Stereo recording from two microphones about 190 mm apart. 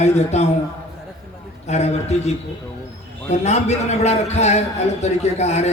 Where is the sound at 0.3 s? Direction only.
35° left (ahead or behind).